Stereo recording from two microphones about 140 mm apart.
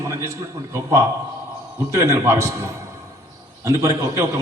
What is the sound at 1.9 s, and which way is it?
Speech, 20° right (ahead or behind).